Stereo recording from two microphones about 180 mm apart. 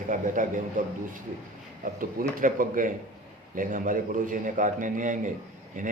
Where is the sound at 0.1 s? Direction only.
45° right (ahead or behind).